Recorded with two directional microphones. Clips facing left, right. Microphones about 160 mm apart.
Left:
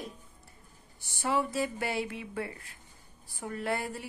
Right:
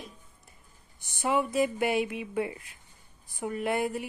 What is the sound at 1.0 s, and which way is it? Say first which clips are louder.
A woman's voice: right 3 dB; 15° right (ahead or behind).